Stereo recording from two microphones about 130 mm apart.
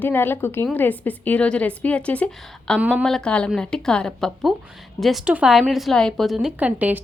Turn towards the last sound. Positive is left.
turn(degrees=-10)  # may be behind; listen again after turning